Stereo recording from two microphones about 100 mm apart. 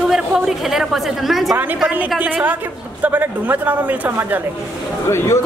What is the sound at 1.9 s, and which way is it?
A man's voice, 15° right (ahead or behind).